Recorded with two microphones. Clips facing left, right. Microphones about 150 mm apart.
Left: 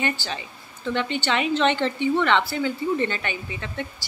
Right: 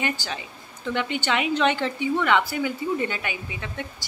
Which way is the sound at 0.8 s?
10° right (ahead or behind).